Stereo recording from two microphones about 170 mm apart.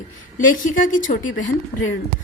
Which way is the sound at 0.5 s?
50° left (ahead or behind).